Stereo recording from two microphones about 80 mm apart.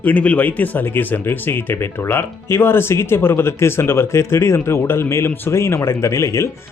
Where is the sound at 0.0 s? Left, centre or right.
Centre.